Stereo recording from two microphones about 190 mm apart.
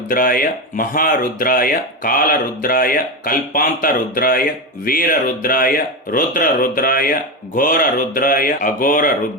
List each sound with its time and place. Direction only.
0.1 s speech: 50° left (ahead or behind)